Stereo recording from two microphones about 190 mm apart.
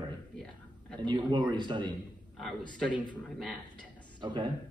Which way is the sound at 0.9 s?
25° right (ahead or behind).